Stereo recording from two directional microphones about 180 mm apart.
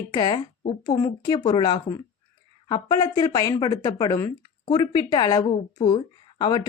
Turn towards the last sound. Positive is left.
turn(degrees=25)  # may be behind; listen again after turning